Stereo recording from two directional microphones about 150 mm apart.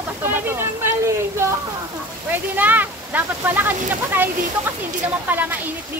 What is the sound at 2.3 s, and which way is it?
Speech, 10° right (ahead or behind).